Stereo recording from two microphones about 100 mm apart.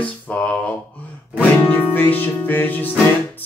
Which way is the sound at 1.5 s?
20° left (ahead or behind).